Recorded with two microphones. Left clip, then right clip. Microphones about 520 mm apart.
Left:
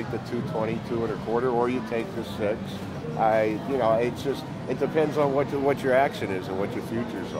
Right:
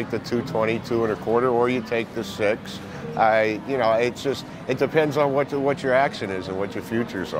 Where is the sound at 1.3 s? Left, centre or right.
Right.